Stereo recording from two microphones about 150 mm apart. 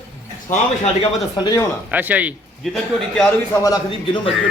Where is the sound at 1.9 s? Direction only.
10° right (ahead or behind).